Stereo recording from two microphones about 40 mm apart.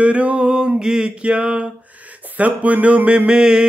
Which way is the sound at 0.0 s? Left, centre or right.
Right.